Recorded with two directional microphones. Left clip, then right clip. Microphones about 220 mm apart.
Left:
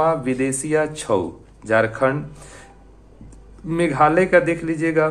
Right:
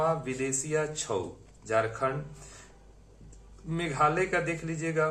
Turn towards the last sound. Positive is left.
turn(degrees=30)  # may be behind; listen again after turning